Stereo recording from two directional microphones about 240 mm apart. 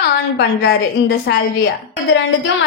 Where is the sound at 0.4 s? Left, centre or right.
Left.